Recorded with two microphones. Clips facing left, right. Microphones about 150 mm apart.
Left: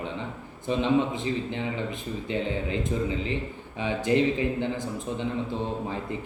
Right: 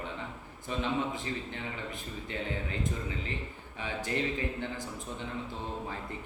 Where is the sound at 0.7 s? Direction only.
25° left (ahead or behind).